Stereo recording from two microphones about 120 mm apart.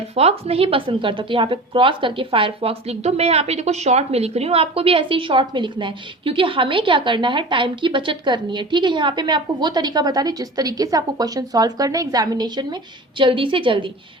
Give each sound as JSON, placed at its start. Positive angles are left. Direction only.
{"t": 0.2, "sound": "a woman's voice", "side_deg": -60}